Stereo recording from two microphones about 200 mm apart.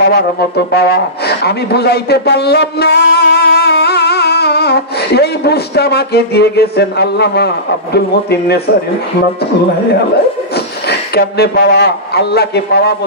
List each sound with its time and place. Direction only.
0.1 s speech: 55° left (ahead or behind)
10.9 s speech: 55° left (ahead or behind)